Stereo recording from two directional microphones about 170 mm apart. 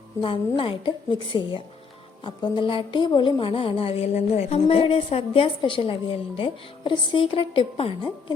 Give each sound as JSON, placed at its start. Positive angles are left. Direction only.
{"t": 0.2, "sound": "a woman's voice", "side_deg": 30}